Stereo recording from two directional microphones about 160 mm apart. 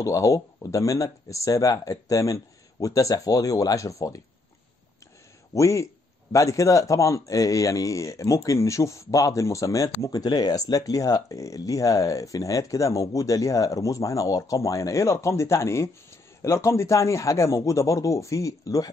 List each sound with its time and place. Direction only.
0.0 s speech: 20° left (ahead or behind)
5.5 s speech: 20° left (ahead or behind)